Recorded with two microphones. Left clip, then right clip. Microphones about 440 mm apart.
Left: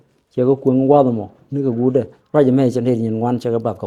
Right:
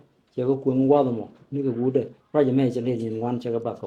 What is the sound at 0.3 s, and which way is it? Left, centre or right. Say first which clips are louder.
Speech: left 8 dB; left.